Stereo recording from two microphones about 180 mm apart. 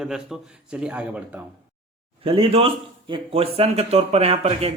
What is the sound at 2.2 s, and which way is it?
Speech, 30° right (ahead or behind).